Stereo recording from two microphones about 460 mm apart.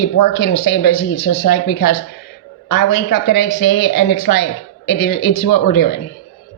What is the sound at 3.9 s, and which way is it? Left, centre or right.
Speech, left.